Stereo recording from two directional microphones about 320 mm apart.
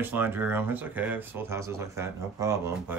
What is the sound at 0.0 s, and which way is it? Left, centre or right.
Speech, centre.